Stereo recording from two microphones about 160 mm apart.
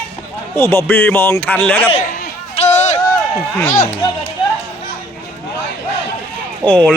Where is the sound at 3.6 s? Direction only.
15° left (ahead or behind).